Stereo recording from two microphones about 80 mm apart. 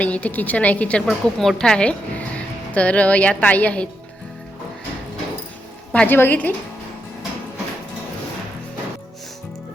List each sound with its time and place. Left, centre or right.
0.0 s a woman's voice: centre
1.0 s a woman's voice: centre
5.9 s a woman's voice: left